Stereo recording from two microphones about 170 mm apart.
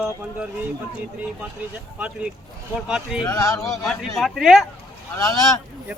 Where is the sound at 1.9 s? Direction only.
10° right (ahead or behind).